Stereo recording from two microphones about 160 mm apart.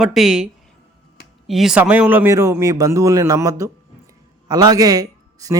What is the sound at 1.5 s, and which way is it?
A man's voice, centre (ahead or behind).